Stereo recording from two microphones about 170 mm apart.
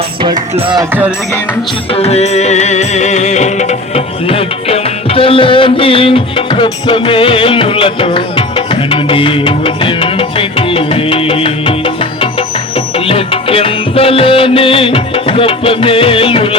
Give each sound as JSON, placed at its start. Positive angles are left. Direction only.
{"t": 0.2, "sound": "music", "side_deg": -30}
{"t": 0.9, "sound": "music", "side_deg": -10}
{"t": 1.9, "sound": "music", "side_deg": 40}